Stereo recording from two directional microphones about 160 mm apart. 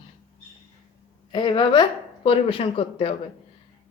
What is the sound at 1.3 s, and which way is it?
A man's voice, 30° left (ahead or behind).